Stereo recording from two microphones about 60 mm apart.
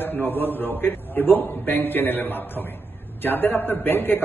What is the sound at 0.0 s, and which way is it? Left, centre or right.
A man's voice, left.